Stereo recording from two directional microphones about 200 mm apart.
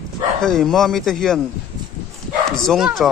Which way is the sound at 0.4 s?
Centre (ahead or behind).